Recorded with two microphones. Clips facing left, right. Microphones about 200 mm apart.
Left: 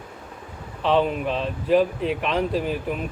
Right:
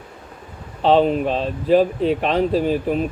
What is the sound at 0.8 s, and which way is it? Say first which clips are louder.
Speech: right 5 dB; 35° right (ahead or behind).